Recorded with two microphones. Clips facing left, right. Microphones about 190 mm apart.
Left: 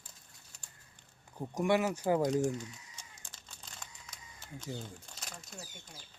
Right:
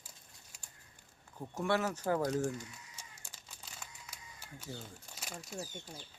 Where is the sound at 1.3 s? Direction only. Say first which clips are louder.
Left 4 dB; 15° left (ahead or behind).